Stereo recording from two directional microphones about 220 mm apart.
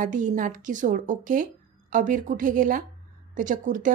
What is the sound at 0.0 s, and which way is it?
Speech, 35° right (ahead or behind).